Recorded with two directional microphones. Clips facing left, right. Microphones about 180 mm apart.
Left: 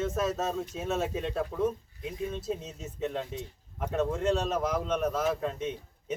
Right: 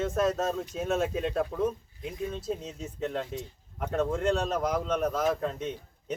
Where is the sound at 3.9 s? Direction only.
5° left (ahead or behind).